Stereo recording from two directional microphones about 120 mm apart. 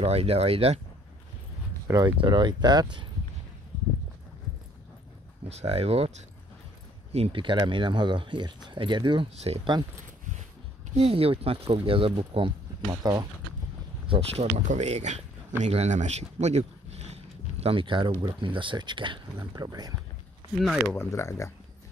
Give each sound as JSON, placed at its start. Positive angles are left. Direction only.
{"t": 0.0, "sound": "speech", "side_deg": -60}
{"t": 2.0, "sound": "speech", "side_deg": -40}
{"t": 5.5, "sound": "speech", "side_deg": -60}
{"t": 7.4, "sound": "speech", "side_deg": -40}
{"t": 11.0, "sound": "speech", "side_deg": -55}
{"t": 13.0, "sound": "speech", "side_deg": -35}
{"t": 14.0, "sound": "speech", "side_deg": -55}
{"t": 20.9, "sound": "speech", "side_deg": 20}